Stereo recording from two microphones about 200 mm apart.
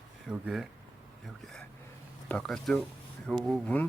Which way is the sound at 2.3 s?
5° left (ahead or behind).